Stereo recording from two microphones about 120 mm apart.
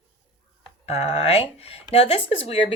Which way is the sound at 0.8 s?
60° left (ahead or behind).